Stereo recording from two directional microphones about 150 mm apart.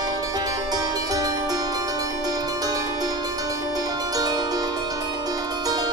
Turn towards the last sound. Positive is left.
turn(degrees=-25)  # may be behind; listen again after turning